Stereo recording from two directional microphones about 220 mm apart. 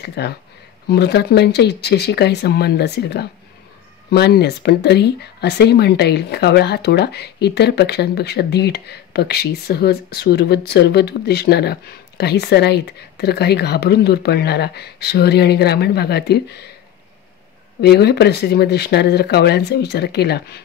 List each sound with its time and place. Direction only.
0.0 s speech: 50° left (ahead or behind)
17.7 s speech: 50° left (ahead or behind)